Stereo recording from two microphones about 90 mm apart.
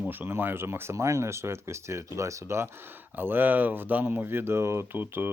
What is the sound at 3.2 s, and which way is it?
Speech, 20° right (ahead or behind).